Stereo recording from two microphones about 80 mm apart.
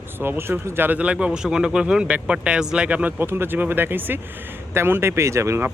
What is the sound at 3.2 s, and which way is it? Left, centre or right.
Speech, right.